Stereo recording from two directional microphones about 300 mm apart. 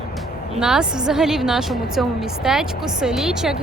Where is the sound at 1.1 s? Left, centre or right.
Centre.